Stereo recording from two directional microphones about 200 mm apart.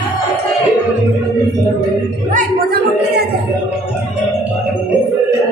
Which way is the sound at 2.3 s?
50° right (ahead or behind).